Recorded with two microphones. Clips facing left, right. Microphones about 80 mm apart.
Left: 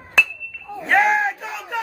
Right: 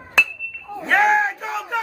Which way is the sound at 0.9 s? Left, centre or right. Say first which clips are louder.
Even; right.